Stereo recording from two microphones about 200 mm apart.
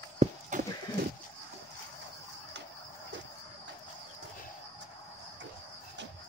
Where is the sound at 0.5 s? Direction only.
40° right (ahead or behind).